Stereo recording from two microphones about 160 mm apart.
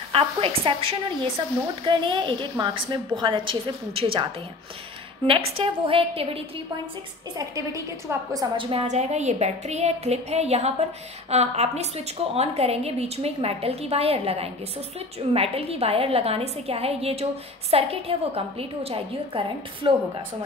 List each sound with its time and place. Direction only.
0.1 s a woman's voice: 35° right (ahead or behind)
7.3 s a woman's voice: 20° right (ahead or behind)
8.5 s a woman's voice: 35° right (ahead or behind)
8.8 s a woman's voice: 45° right (ahead or behind)